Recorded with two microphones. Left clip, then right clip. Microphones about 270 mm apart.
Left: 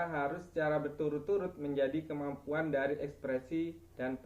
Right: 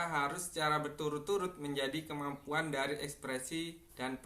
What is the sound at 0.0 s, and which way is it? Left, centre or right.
Speech, centre.